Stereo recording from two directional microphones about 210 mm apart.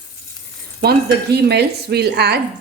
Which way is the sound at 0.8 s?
50° right (ahead or behind).